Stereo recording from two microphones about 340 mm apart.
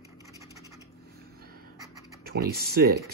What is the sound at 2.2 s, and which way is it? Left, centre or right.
Speech, right.